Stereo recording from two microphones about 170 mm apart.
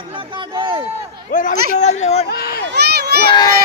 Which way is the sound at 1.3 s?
50° left (ahead or behind).